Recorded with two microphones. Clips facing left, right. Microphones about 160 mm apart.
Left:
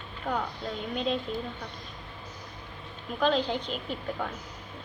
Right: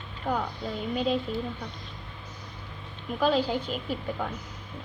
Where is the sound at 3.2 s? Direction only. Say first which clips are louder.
Right 1 dB; 5° right (ahead or behind).